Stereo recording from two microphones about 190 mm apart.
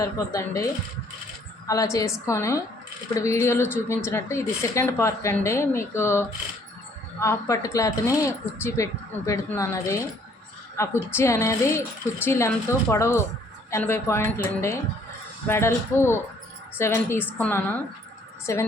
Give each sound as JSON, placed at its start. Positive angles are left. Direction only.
{"t": 0.0, "sound": "a woman's voice", "side_deg": 15}